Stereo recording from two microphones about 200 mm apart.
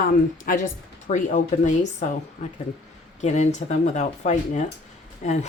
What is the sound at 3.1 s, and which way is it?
Speech, 35° left (ahead or behind).